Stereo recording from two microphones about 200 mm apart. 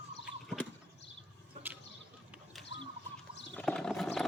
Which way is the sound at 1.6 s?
35° right (ahead or behind).